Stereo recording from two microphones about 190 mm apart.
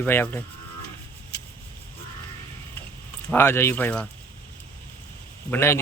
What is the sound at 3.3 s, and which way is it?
Speech, 10° left (ahead or behind).